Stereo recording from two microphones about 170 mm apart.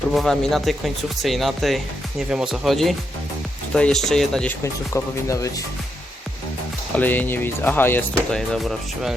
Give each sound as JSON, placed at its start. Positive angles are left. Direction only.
{"t": 0.1, "sound": "speech", "side_deg": 0}
{"t": 4.6, "sound": "speech", "side_deg": 15}
{"t": 6.9, "sound": "speech", "side_deg": 10}